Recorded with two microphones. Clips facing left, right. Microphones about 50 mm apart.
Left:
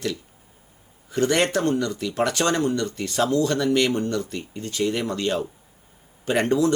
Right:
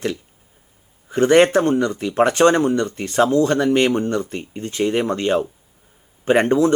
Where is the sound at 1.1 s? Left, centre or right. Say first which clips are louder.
Right 8 dB; right.